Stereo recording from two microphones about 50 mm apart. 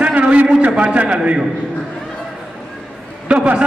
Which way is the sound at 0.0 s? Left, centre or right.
Right.